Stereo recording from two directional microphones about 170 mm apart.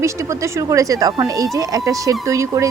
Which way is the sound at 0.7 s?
20° right (ahead or behind).